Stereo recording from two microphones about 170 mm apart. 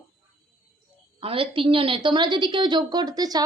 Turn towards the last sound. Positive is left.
turn(degrees=-25)  # may be behind; listen again after turning